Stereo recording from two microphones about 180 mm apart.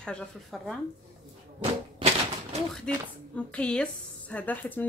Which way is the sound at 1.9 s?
35° right (ahead or behind).